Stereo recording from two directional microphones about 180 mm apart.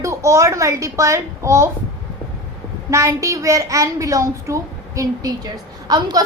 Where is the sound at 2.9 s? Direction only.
15° right (ahead or behind).